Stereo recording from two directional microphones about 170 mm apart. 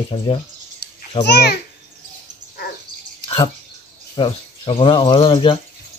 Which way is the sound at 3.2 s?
30° left (ahead or behind).